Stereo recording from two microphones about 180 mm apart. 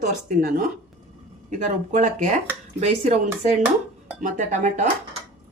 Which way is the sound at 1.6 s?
40° right (ahead or behind).